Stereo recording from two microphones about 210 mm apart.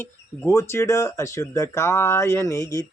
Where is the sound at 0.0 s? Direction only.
10° left (ahead or behind).